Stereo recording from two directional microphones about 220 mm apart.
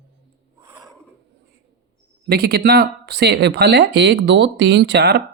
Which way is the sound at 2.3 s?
45° right (ahead or behind).